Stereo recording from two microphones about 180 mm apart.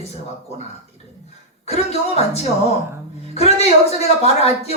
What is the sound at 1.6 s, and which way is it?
Speech, 35° left (ahead or behind).